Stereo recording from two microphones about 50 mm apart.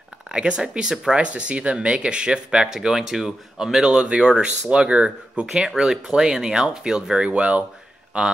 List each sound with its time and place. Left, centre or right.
0.3 s speech: right